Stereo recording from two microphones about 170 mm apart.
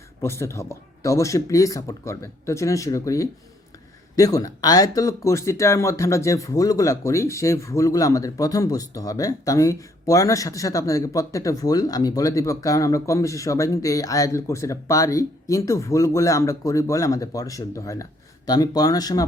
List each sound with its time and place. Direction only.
0.2 s speech: 15° left (ahead or behind)